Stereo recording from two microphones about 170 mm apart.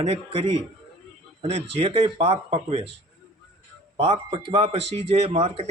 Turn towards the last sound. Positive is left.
turn(degrees=-35)  # may be behind; listen again after turning